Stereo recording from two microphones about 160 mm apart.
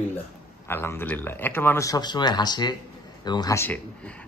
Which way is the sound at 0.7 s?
15° left (ahead or behind).